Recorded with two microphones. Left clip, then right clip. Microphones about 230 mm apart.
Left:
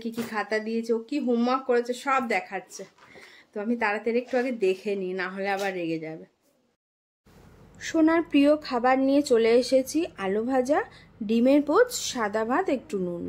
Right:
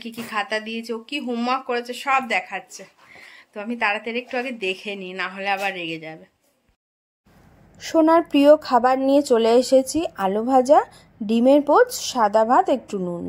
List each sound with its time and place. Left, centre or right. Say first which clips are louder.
0.0 s speech: right 4 dB; centre
7.8 s speech: right 6 dB; centre